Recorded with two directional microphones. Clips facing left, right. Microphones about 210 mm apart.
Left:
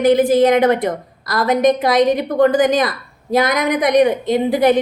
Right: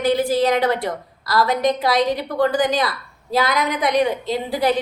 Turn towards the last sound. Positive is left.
turn(degrees=20)  # may be behind; listen again after turning